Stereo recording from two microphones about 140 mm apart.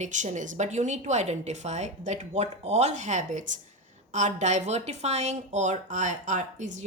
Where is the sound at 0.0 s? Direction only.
60° right (ahead or behind).